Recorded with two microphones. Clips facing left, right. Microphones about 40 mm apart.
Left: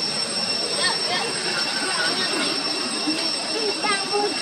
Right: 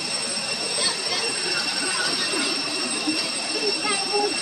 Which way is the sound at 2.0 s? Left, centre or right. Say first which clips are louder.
Left 3 dB; left.